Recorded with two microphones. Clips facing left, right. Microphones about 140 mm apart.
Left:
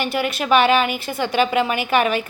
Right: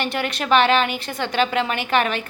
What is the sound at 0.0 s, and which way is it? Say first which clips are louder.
A woman's voice: left 2 dB; 5° left (ahead or behind).